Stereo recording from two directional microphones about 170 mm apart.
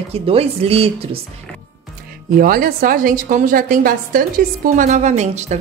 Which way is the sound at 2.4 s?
55° right (ahead or behind).